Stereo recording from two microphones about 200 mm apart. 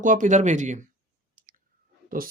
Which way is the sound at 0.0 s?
40° right (ahead or behind).